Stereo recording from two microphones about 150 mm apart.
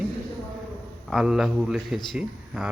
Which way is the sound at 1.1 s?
Centre (ahead or behind).